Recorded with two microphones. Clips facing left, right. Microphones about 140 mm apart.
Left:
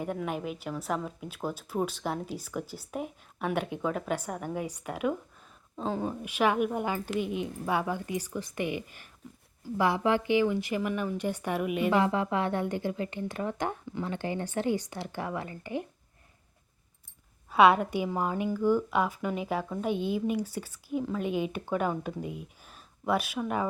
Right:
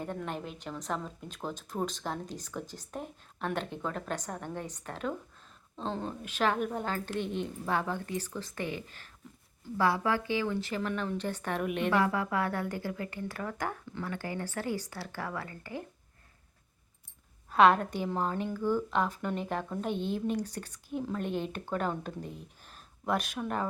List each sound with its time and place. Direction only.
0.0 s a woman's voice: 10° left (ahead or behind)
11.9 s a woman's voice: 20° left (ahead or behind)
17.5 s a woman's voice: 10° left (ahead or behind)